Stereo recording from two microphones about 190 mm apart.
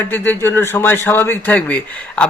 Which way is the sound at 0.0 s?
10° left (ahead or behind).